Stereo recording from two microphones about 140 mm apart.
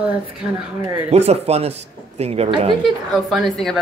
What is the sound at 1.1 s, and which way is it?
A woman's voice, 50° right (ahead or behind).